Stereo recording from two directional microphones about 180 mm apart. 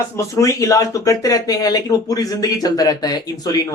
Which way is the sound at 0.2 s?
20° left (ahead or behind).